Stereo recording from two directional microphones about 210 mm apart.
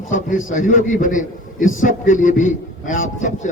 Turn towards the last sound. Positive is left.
turn(degrees=35)  # may be behind; listen again after turning